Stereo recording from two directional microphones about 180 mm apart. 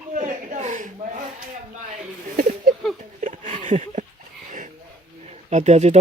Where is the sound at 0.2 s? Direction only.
45° right (ahead or behind).